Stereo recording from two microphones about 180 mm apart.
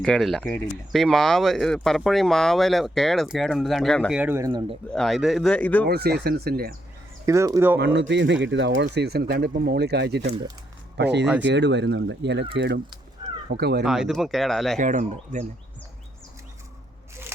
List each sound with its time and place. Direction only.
0.0 s speech: centre (ahead or behind)
4.2 s speech: 15° right (ahead or behind)
4.9 s speech: centre (ahead or behind)
5.9 s speech: 60° right (ahead or behind)
7.3 s speech: 15° right (ahead or behind)
7.8 s speech: 80° right; by 13.8 s 60° right (ahead or behind)
13.8 s speech: 5° right (ahead or behind)
14.8 s speech: 45° right (ahead or behind)